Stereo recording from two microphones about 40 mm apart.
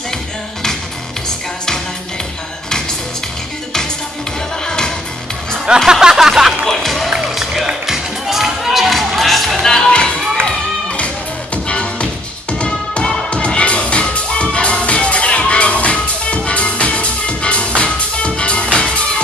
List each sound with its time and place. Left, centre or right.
4.6 s music: centre
5.9 s music: centre
6.6 s speech: centre
7.2 s music: centre
9.7 s music: centre